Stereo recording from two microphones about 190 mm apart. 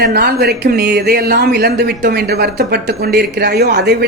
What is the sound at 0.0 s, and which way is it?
Speech, 60° right (ahead or behind).